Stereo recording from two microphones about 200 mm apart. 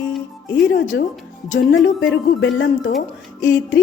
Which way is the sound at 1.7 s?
65° left (ahead or behind).